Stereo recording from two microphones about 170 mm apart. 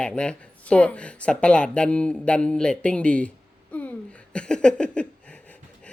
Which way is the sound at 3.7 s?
10° left (ahead or behind).